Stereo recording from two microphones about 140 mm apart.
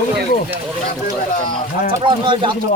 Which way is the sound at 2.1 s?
35° right (ahead or behind).